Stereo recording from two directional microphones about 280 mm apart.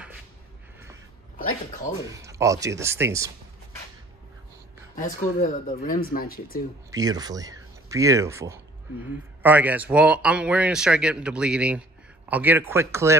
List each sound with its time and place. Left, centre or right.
2.0 s a man's voice: centre
4.9 s speech: left
6.9 s a man's voice: centre